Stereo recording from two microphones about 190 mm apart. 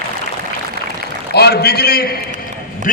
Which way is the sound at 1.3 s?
55° left (ahead or behind).